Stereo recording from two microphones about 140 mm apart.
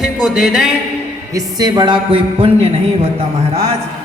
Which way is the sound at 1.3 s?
30° right (ahead or behind).